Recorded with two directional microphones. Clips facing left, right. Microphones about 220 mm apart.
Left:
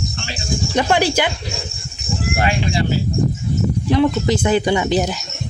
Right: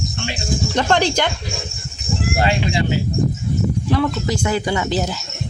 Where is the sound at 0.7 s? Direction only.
10° left (ahead or behind).